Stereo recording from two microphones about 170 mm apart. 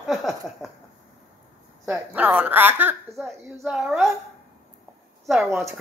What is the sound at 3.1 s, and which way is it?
A woman's voice, centre (ahead or behind).